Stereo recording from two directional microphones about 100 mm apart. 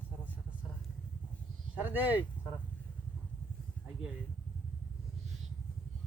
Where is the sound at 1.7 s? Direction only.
20° right (ahead or behind).